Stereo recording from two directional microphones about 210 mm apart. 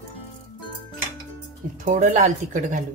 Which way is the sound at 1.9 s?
35° right (ahead or behind).